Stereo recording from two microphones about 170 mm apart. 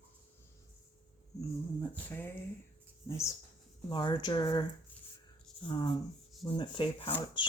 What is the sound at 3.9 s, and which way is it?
Speech, 25° left (ahead or behind).